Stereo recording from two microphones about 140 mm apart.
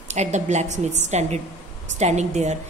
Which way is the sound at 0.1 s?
55° right (ahead or behind).